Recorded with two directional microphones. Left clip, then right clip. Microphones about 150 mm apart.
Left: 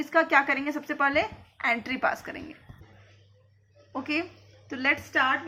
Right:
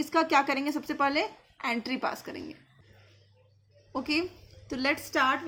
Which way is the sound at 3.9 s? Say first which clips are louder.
Even; 55° right (ahead or behind).